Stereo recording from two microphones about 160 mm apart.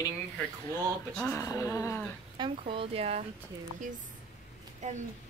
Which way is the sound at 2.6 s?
35° right (ahead or behind).